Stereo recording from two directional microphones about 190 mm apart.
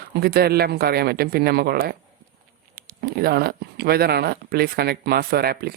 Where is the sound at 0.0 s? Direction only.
55° right (ahead or behind).